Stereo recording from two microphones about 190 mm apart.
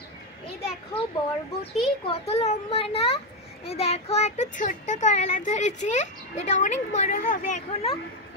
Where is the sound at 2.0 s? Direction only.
35° left (ahead or behind).